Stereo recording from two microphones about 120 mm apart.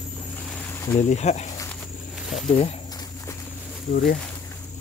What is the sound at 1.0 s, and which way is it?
Speech, 75° left (ahead or behind).